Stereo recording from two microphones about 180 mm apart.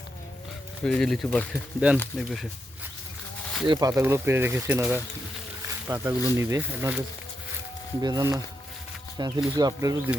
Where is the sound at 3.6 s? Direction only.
20° right (ahead or behind).